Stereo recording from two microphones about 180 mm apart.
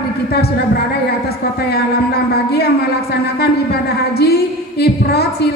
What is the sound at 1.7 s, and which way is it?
A woman's voice, 60° left (ahead or behind).